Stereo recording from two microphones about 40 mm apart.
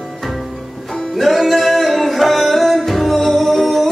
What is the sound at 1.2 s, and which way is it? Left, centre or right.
Music, centre.